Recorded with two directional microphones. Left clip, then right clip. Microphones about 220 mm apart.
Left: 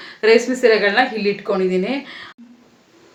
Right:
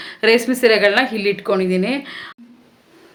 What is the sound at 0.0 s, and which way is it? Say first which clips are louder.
A woman's voice: left 1 dB; 45° right (ahead or behind).